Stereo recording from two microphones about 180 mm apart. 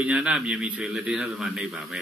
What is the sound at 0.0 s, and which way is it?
A man's voice, 5° right (ahead or behind).